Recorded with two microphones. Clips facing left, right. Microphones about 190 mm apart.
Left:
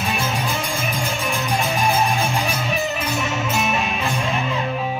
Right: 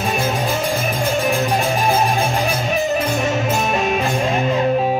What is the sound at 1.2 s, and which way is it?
Music, 35° right (ahead or behind).